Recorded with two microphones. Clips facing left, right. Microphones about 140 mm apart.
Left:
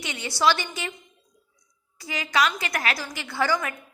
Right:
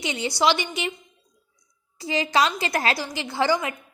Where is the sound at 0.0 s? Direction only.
25° right (ahead or behind).